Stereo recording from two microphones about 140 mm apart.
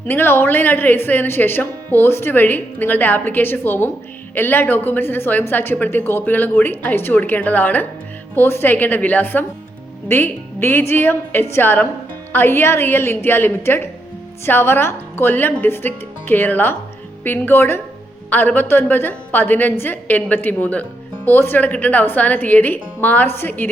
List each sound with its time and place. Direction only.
0.1 s a woman's voice: 15° left (ahead or behind)